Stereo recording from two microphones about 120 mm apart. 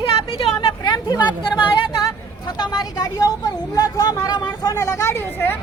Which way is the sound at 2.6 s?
35° left (ahead or behind).